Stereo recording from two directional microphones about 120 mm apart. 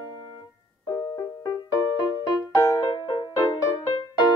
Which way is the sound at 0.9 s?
30° left (ahead or behind).